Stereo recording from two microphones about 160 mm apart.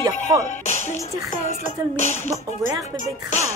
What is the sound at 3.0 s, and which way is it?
Music, 50° left (ahead or behind).